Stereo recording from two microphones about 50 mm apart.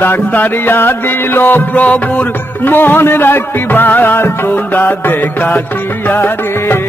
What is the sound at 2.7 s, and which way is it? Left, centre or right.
Music, left.